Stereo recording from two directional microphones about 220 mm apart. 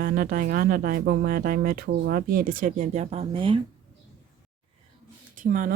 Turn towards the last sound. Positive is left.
turn(degrees=-35)  # may be behind; listen again after turning